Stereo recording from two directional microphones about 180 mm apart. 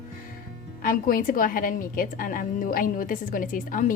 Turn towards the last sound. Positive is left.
turn(degrees=45)  # may be behind; listen again after turning